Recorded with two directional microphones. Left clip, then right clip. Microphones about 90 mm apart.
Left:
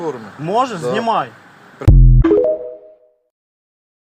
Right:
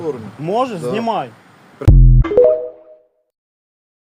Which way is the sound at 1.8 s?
55° right (ahead or behind).